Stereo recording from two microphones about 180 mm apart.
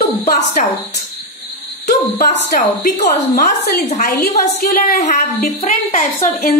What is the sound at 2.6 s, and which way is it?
A woman's voice, 40° left (ahead or behind).